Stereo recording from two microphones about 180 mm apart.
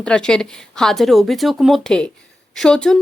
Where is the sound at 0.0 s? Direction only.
5° left (ahead or behind).